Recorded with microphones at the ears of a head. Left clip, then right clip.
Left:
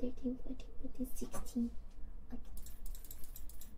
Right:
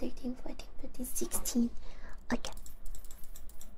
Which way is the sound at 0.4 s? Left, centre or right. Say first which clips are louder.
Right 4 dB; right.